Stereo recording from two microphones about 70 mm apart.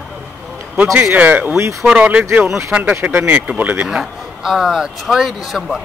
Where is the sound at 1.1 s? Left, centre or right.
Right.